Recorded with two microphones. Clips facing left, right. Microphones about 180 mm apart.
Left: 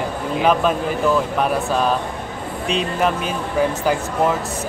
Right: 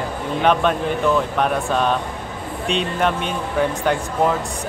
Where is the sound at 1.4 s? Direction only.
5° left (ahead or behind).